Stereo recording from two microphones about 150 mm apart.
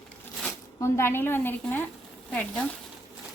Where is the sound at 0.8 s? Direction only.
15° left (ahead or behind).